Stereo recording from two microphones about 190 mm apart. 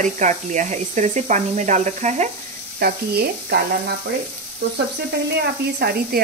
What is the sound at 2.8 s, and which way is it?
Speech, 55° right (ahead or behind).